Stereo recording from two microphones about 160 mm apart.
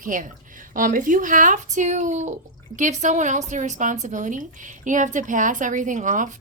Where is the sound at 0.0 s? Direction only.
55° right (ahead or behind).